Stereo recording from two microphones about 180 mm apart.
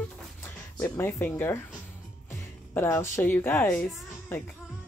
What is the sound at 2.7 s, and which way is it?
Speech, 15° left (ahead or behind).